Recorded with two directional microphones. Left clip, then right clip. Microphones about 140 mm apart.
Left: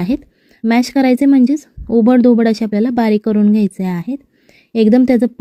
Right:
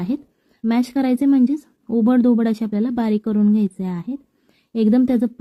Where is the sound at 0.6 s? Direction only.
40° left (ahead or behind).